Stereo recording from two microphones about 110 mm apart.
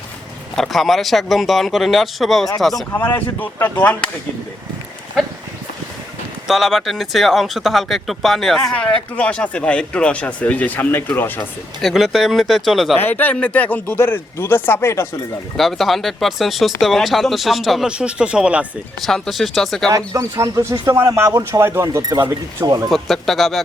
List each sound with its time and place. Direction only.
0.5 s speech: 5° left (ahead or behind)
2.9 s speech: 20° left (ahead or behind)
6.5 s speech: centre (ahead or behind); by 11.3 s 20° left (ahead or behind)
11.8 s speech: centre (ahead or behind)
13.0 s speech: 15° left (ahead or behind)
15.5 s speech: centre (ahead or behind)
19.0 s speech: 5° left (ahead or behind)
20.1 s speech: 30° right (ahead or behind)
22.9 s speech: centre (ahead or behind)